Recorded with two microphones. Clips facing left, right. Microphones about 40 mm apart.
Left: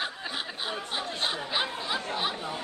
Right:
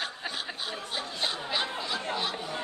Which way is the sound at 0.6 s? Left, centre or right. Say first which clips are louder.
Left 2 dB; centre.